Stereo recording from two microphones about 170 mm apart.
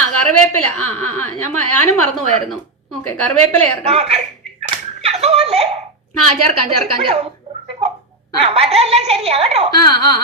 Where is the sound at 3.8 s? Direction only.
35° right (ahead or behind).